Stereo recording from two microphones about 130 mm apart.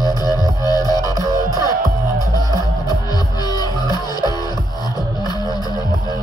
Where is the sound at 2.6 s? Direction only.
30° left (ahead or behind).